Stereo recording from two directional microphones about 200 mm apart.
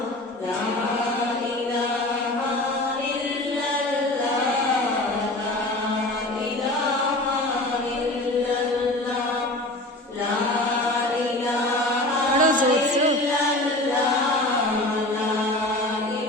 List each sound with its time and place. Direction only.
12.4 s chant: 40° right (ahead or behind)